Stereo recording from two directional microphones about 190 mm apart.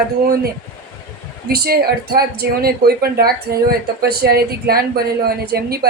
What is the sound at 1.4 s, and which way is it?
A woman's voice, 55° right (ahead or behind).